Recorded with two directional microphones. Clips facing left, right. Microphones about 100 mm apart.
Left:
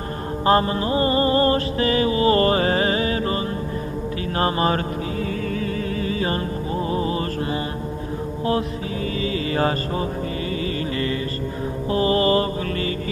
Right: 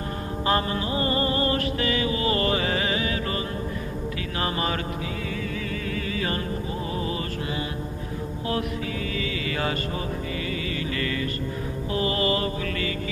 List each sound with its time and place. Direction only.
0.5 s music: 35° left (ahead or behind)
4.4 s music: 35° left (ahead or behind)
5.9 s music: 30° left (ahead or behind)
9.2 s music: 35° left (ahead or behind)
11.9 s mantra: 35° left (ahead or behind)